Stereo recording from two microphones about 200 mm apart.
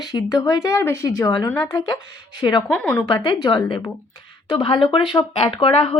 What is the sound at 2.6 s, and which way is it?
Speech, 5° left (ahead or behind).